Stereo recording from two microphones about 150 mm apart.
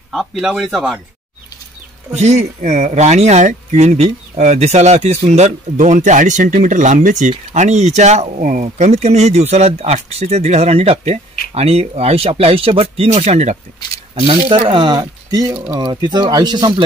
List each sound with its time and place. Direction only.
0.1 s speech: centre (ahead or behind)
2.1 s speech: 50° right (ahead or behind)
8.6 s speech: 50° right (ahead or behind)
14.7 s speech: 30° right (ahead or behind)